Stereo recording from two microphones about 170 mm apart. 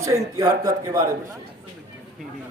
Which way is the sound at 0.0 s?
20° right (ahead or behind).